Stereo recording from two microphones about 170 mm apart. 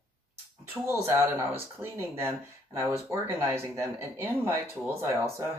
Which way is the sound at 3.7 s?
15° right (ahead or behind).